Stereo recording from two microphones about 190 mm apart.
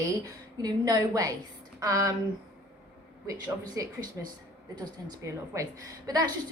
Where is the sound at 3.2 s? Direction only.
20° right (ahead or behind).